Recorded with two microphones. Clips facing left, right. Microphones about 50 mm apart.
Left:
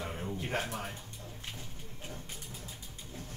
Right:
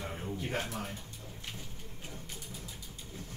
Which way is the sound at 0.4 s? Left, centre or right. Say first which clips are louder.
Left 1 dB; left.